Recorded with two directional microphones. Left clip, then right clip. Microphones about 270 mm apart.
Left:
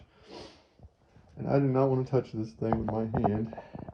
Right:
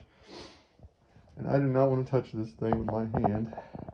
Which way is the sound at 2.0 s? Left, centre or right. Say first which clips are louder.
Left 1 dB; centre.